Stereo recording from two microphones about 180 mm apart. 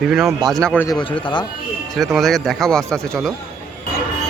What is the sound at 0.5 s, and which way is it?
Speech, 5° left (ahead or behind).